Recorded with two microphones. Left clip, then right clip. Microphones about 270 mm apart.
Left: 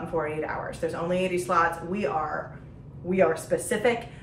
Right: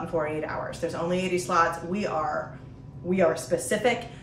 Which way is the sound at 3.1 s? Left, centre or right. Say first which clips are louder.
Even; centre.